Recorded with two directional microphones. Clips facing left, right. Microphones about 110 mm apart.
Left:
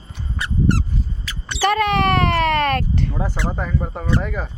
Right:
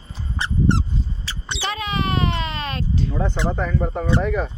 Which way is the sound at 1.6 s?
60° left (ahead or behind).